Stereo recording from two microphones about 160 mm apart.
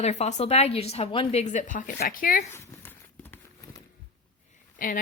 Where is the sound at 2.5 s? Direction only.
15° left (ahead or behind).